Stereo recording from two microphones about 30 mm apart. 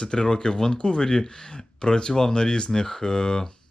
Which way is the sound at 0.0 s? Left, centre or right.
Left.